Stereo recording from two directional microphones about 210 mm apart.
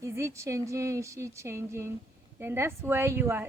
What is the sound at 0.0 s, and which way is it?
A woman's voice, 15° right (ahead or behind).